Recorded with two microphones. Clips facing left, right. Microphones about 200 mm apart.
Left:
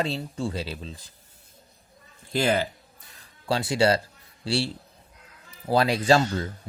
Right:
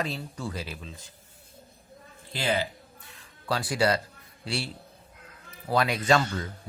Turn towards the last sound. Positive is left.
turn(degrees=30)  # may be behind; listen again after turning